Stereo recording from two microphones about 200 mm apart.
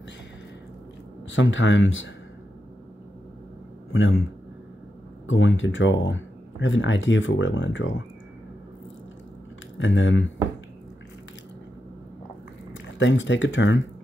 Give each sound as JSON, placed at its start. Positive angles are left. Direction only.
{"t": 1.3, "sound": "speech", "side_deg": 70}
{"t": 3.9, "sound": "a man's voice", "side_deg": 75}
{"t": 5.2, "sound": "speech", "side_deg": 75}
{"t": 9.8, "sound": "speech", "side_deg": 70}
{"t": 13.0, "sound": "speech", "side_deg": 70}